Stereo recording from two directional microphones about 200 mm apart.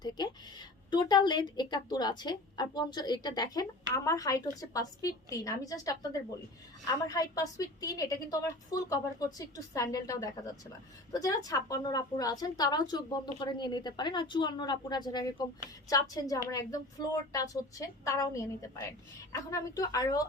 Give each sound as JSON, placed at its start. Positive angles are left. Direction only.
{"t": 0.9, "sound": "a woman's voice", "side_deg": 20}
{"t": 7.1, "sound": "a woman's voice", "side_deg": 15}